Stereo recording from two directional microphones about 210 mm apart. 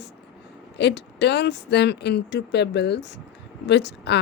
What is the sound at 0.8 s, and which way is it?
Speech, 55° left (ahead or behind).